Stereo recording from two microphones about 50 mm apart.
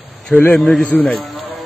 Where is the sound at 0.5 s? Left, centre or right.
Centre.